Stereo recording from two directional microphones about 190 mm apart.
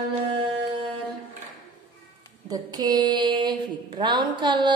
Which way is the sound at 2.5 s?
20° right (ahead or behind).